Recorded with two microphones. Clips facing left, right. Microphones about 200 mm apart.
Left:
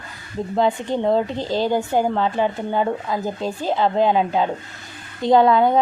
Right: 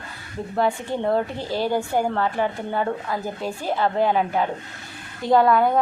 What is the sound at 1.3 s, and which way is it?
Speech, 10° right (ahead or behind).